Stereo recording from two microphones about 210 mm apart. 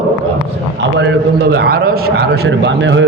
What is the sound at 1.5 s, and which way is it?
Speech, 50° right (ahead or behind).